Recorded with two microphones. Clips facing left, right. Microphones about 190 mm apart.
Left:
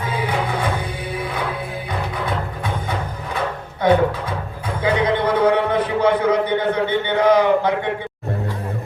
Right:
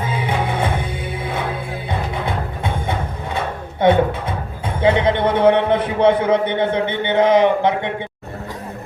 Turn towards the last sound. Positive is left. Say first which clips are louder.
# right 1 dB
turn(degrees=-25)  # may be behind; listen again after turning